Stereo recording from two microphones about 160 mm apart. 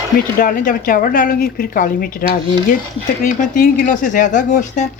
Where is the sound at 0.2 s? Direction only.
65° left (ahead or behind).